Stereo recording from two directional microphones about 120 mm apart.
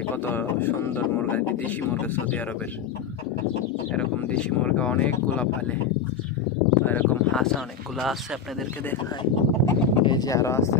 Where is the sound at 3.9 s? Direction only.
10° left (ahead or behind).